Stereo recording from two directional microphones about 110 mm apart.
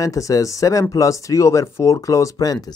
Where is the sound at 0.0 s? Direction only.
30° left (ahead or behind).